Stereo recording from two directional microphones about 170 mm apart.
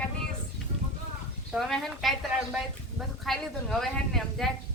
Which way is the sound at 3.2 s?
Centre (ahead or behind).